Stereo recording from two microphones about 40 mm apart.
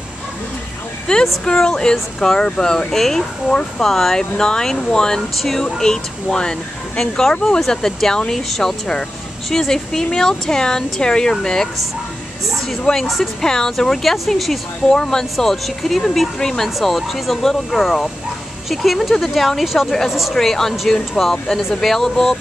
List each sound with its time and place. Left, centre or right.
1.1 s speech: centre
2.9 s speech: centre
5.8 s speech: centre
13.0 s speech: centre
13.4 s speech: centre
14.9 s speech: centre
15.3 s speech: centre
20.3 s speech: centre